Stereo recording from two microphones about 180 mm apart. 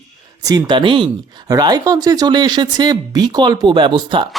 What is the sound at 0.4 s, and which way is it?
Speech, 25° right (ahead or behind).